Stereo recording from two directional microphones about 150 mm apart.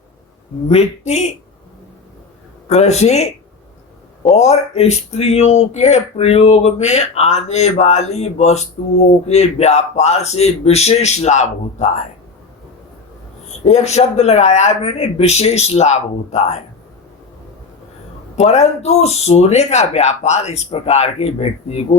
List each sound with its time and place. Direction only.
0.7 s speech: 45° left (ahead or behind)
2.6 s speech: 50° left (ahead or behind)
13.7 s speech: 45° left (ahead or behind)
18.3 s speech: 45° left (ahead or behind)